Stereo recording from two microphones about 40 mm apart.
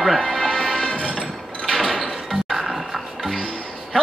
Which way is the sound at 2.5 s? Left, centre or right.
Centre.